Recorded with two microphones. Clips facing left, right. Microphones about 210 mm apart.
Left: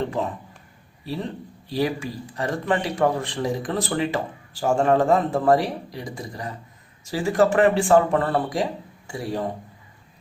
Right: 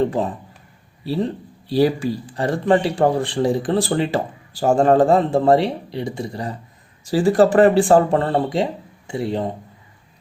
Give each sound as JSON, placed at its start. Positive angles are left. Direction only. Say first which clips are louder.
{"t": 0.0, "sound": "a man's voice", "louder": "right 6 dB", "side_deg": -35}